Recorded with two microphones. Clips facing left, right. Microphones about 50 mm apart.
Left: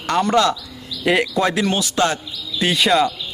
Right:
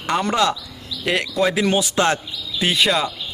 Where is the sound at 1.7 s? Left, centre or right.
Right.